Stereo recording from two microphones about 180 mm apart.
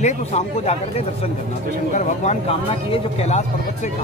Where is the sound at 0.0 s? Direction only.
40° left (ahead or behind).